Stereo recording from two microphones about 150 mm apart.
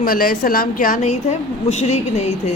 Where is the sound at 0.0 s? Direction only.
70° left (ahead or behind).